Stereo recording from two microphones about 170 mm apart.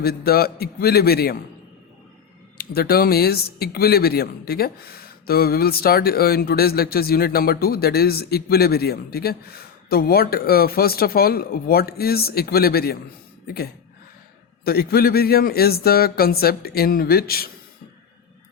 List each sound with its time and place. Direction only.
0.0 s speech: 65° left (ahead or behind)
2.6 s speech: 65° left (ahead or behind)
14.6 s speech: 65° left (ahead or behind)